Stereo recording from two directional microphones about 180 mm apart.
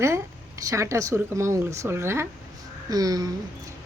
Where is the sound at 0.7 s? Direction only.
15° right (ahead or behind).